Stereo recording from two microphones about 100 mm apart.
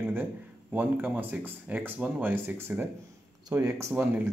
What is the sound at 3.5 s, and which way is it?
Speech, 35° right (ahead or behind).